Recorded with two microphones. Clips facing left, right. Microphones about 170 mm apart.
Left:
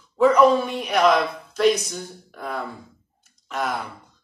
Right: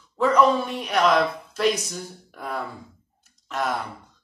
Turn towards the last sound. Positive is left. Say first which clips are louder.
# even
turn(degrees=0)  # may be behind; listen again after turning